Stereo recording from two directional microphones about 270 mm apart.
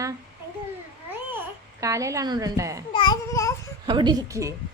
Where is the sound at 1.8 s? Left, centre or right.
Centre.